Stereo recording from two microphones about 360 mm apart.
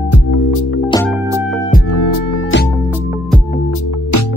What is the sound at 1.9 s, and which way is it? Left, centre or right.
Music, left.